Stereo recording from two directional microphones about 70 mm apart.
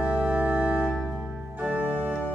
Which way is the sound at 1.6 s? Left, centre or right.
Right.